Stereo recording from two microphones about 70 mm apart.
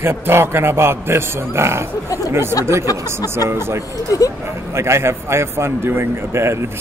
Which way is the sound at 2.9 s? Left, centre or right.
Left.